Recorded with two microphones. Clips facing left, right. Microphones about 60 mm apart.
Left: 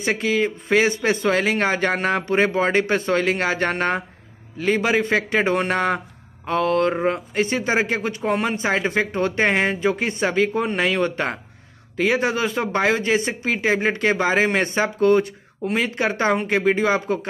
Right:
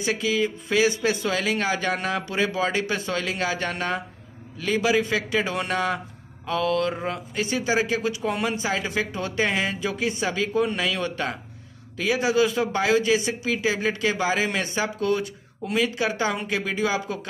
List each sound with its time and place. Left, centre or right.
0.0 s speech: left